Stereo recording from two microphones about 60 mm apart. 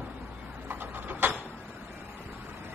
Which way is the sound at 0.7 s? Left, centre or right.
Right.